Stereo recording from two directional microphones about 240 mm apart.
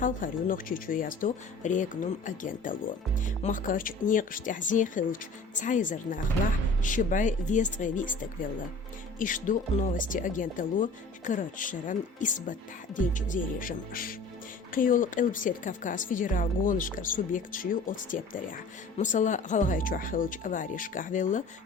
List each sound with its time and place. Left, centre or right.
0.0 s speech: left